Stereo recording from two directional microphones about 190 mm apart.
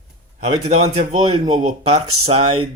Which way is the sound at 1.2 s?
30° right (ahead or behind).